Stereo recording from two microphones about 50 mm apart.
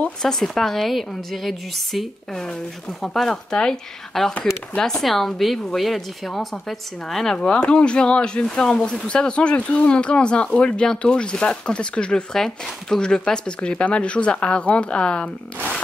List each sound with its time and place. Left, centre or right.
0.2 s a woman's voice: centre
7.3 s speech: left
12.4 s speech: centre
13.0 s speech: centre